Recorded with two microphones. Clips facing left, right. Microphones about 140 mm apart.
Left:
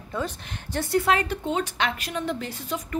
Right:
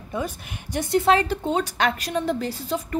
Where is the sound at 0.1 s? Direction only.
15° right (ahead or behind).